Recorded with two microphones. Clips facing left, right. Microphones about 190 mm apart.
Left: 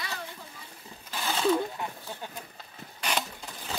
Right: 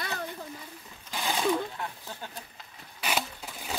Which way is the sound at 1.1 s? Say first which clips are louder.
Right 1 dB; 15° right (ahead or behind).